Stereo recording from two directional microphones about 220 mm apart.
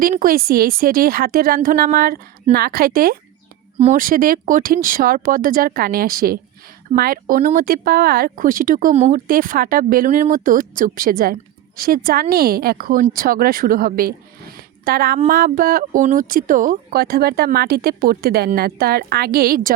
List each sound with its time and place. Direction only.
0.0 s speech: 40° right (ahead or behind)